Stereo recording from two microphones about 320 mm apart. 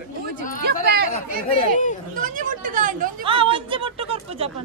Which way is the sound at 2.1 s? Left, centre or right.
Right.